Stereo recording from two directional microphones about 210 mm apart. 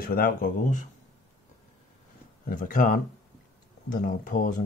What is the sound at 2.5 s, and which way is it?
Speech, 40° left (ahead or behind).